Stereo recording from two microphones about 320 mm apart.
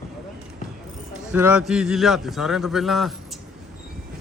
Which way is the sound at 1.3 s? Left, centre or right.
Centre.